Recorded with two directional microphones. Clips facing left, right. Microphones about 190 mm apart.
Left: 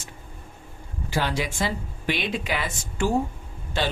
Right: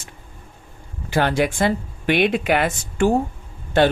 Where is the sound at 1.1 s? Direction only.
55° right (ahead or behind).